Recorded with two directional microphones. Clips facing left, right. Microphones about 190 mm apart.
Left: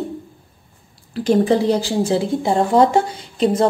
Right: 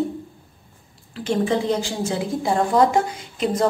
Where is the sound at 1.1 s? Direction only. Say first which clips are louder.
Left 6 dB; 35° left (ahead or behind).